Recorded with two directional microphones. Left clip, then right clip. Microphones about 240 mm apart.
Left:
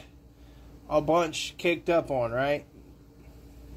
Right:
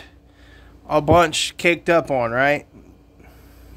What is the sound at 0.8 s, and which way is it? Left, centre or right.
Speech, right.